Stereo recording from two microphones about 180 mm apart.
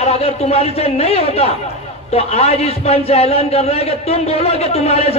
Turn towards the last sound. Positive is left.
turn(degrees=35)  # may be behind; listen again after turning